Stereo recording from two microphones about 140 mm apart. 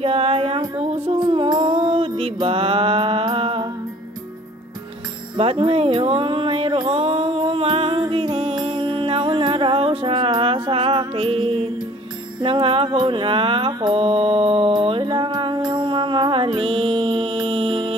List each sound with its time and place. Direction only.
0.0 s music: 45° right (ahead or behind)
5.4 s a sound: 40° right (ahead or behind)
12.4 s mantra: 35° right (ahead or behind)